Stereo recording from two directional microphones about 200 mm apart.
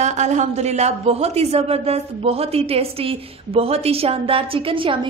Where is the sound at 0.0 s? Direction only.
35° right (ahead or behind).